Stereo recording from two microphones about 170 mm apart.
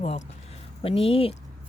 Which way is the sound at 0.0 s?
45° left (ahead or behind).